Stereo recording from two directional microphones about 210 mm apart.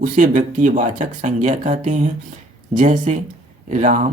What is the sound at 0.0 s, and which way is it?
Speech, 40° right (ahead or behind).